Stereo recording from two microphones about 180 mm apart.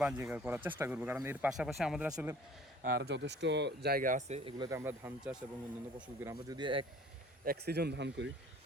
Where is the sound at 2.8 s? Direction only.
65° right (ahead or behind); by 4.5 s 35° right (ahead or behind).